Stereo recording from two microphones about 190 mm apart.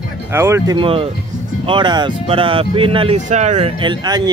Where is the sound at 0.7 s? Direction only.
30° right (ahead or behind).